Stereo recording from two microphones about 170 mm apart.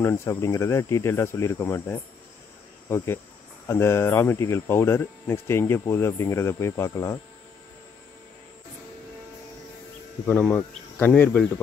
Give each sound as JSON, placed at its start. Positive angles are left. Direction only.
{"t": 0.0, "sound": "speech", "side_deg": 15}
{"t": 3.6, "sound": "speech", "side_deg": 15}
{"t": 10.2, "sound": "speech", "side_deg": 10}